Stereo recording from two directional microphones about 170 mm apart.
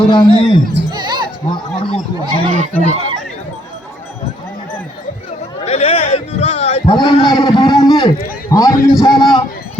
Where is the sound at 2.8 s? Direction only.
40° left (ahead or behind).